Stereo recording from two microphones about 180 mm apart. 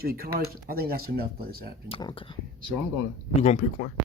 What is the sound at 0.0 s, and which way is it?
Speech, 55° right (ahead or behind).